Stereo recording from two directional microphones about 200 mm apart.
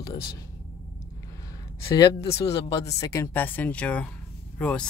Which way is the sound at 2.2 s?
30° left (ahead or behind).